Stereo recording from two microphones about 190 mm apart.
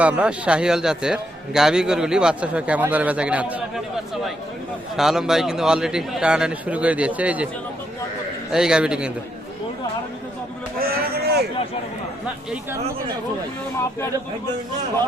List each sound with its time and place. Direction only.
0.0 s a man's voice: 5° right (ahead or behind)
4.9 s a man's voice: centre (ahead or behind)
8.5 s a man's voice: 5° right (ahead or behind)
10.8 s a sound: 55° right (ahead or behind)